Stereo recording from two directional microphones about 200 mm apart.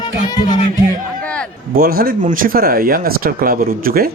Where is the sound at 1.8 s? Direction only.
45° right (ahead or behind).